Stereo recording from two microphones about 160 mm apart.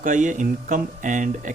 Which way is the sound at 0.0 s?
50° right (ahead or behind).